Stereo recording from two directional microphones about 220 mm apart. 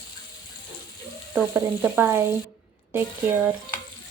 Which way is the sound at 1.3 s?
10° right (ahead or behind).